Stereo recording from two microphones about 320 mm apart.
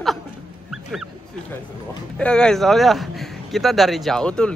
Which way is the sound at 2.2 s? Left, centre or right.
Centre.